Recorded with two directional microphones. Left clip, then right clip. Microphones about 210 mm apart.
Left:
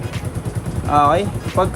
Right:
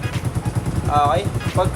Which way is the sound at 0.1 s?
Centre (ahead or behind).